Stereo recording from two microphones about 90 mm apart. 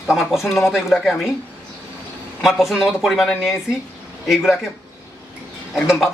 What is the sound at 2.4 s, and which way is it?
Speech, 5° right (ahead or behind).